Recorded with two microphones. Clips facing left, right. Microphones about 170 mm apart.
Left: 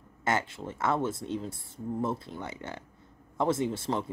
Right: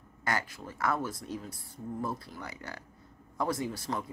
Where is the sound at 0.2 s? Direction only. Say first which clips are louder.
Left 4 dB; 25° left (ahead or behind).